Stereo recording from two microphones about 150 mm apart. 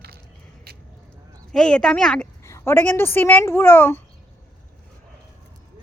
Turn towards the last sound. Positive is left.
turn(degrees=15)  # may be behind; listen again after turning